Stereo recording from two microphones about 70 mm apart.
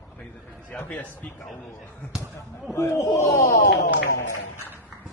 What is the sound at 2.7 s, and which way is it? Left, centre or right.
Speech, left.